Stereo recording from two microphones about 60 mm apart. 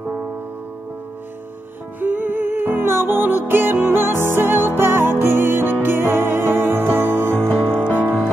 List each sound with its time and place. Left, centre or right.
2.0 s music: right